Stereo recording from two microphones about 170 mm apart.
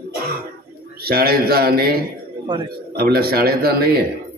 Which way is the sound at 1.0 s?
65° right (ahead or behind).